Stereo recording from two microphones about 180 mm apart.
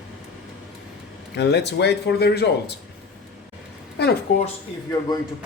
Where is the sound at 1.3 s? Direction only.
70° left (ahead or behind).